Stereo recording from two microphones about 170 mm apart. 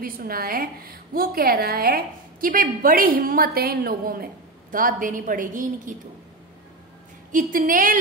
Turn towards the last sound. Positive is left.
turn(degrees=-55)  # may be behind; listen again after turning